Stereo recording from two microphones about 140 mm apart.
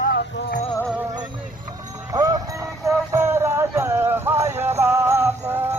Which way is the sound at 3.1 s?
20° right (ahead or behind).